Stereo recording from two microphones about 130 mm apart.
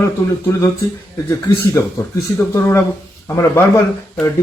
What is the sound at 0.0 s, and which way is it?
Speech, 20° left (ahead or behind).